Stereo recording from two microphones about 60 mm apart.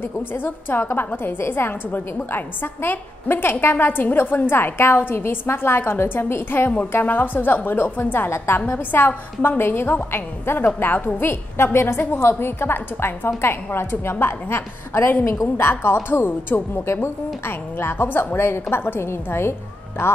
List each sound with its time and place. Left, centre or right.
0.0 s a woman's voice: left